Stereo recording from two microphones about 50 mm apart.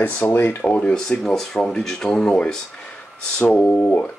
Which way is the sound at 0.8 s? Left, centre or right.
Centre.